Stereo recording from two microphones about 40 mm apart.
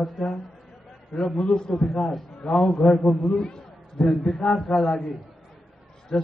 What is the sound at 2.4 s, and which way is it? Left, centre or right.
Speech, centre.